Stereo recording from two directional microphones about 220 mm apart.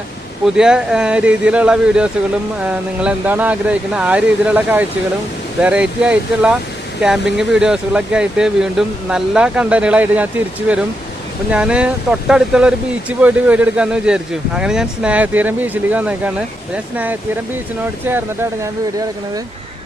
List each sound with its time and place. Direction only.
0.4 s speech: 5° right (ahead or behind)